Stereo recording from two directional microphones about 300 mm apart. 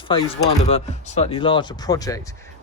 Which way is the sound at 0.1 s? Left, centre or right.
Centre.